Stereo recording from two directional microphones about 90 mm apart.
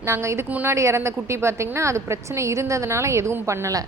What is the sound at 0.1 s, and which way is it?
A woman's voice, 30° right (ahead or behind).